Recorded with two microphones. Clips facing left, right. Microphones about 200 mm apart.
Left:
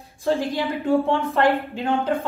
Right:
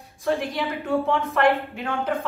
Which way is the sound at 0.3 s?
30° left (ahead or behind).